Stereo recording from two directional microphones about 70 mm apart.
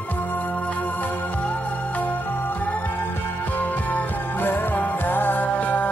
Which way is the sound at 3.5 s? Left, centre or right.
Left.